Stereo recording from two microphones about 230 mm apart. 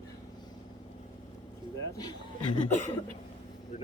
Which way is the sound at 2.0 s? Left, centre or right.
Centre.